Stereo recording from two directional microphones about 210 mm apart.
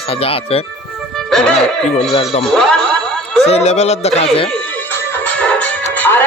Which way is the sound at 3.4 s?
30° left (ahead or behind).